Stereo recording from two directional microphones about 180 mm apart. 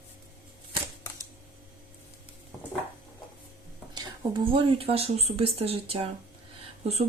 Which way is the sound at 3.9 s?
25° right (ahead or behind).